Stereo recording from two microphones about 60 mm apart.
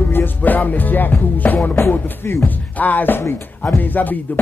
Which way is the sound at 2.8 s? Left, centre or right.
Left.